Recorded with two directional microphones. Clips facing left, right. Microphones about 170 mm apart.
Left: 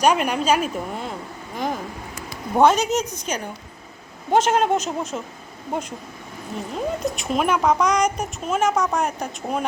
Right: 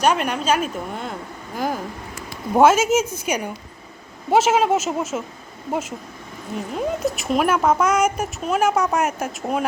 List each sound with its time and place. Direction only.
0.0 s a woman's voice: 10° left (ahead or behind)
6.7 s a child's voice: centre (ahead or behind)